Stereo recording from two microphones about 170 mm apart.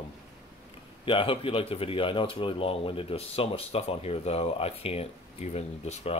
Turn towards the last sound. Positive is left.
turn(degrees=40)  # may be behind; listen again after turning